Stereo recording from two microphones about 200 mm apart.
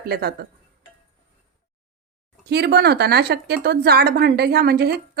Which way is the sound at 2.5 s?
55° right (ahead or behind).